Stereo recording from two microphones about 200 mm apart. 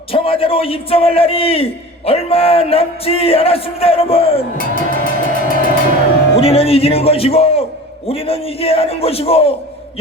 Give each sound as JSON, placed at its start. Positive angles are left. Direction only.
{"t": 0.1, "sound": "a man's voice", "side_deg": 30}
{"t": 4.5, "sound": "music", "side_deg": 45}
{"t": 6.3, "sound": "a man's voice", "side_deg": 30}